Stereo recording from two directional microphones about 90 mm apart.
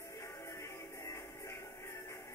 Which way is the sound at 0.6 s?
35° left (ahead or behind).